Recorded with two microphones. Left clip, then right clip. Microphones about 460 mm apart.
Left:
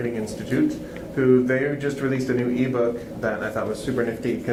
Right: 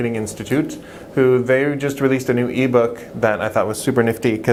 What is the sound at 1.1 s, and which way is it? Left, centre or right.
Speech, right.